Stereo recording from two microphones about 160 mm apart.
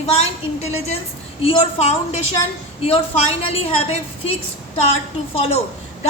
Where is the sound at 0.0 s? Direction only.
40° left (ahead or behind).